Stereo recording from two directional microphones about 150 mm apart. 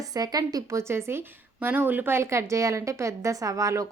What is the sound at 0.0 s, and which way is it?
A woman's voice, 25° right (ahead or behind).